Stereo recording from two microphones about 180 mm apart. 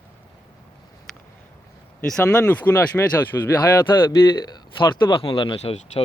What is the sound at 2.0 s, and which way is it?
Speech, 5° left (ahead or behind).